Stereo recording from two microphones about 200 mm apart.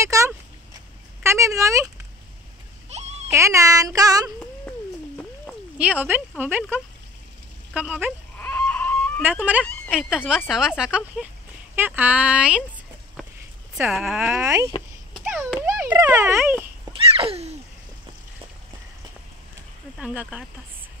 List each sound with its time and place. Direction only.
0.0 s speech: 15° right (ahead or behind)
2.9 s baby cry: 35° right (ahead or behind)
3.3 s child singing: 15° right (ahead or behind)
5.8 s child singing: 5° right (ahead or behind)
8.4 s a sound: 10° left (ahead or behind)
9.3 s speech: 5° right (ahead or behind)
11.7 s child singing: 10° right (ahead or behind)
13.7 s speech: centre (ahead or behind)
16.9 s babbling: 30° right (ahead or behind)
20.0 s speech: 5° right (ahead or behind)